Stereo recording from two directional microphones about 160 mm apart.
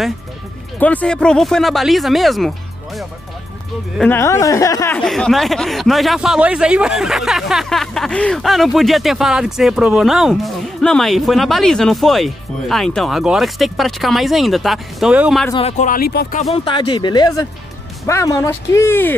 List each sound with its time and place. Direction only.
0.7 s speech: 10° left (ahead or behind)
4.0 s speech: 15° left (ahead or behind)
4.9 s speech: 5° left (ahead or behind)
15.6 s speech: 45° left (ahead or behind)
16.0 s speech: 80° left
16.5 s speech: 30° left (ahead or behind); by 19.1 s 15° left (ahead or behind)